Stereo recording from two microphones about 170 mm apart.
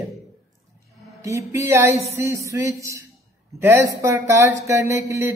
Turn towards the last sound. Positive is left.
turn(degrees=-15)  # may be behind; listen again after turning